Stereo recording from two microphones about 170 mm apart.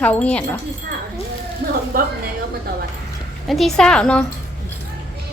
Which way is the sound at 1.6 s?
65° right (ahead or behind).